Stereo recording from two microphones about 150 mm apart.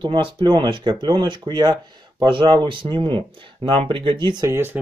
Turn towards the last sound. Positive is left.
turn(degrees=-30)  # may be behind; listen again after turning